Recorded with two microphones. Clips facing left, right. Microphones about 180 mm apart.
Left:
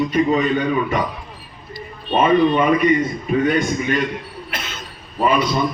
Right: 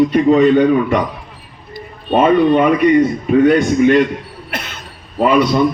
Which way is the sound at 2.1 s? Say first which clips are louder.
Right 4 dB; 60° right (ahead or behind).